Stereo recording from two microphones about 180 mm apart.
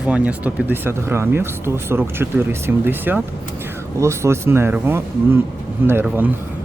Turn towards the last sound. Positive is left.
turn(degrees=-10)  # may be behind; listen again after turning